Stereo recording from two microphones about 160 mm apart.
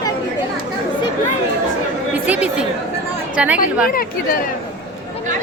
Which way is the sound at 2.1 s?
10° right (ahead or behind).